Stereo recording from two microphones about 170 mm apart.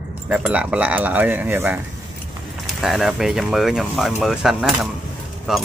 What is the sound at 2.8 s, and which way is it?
Speech, centre (ahead or behind).